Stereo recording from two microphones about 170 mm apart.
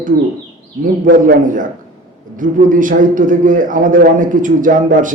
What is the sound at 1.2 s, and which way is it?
A man's voice, 50° right (ahead or behind).